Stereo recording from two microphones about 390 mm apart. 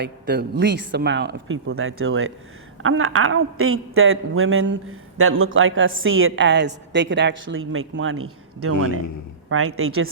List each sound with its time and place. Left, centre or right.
0.0 s a man's voice: right